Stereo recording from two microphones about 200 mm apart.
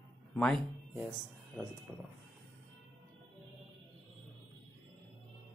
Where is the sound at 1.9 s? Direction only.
10° right (ahead or behind).